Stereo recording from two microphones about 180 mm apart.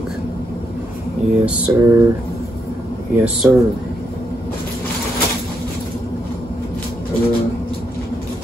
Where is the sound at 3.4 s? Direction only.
5° right (ahead or behind).